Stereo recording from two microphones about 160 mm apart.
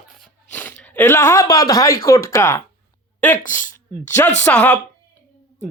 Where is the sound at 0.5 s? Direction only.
10° left (ahead or behind).